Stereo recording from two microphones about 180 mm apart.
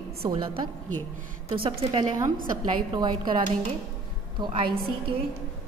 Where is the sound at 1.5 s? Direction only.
30° right (ahead or behind).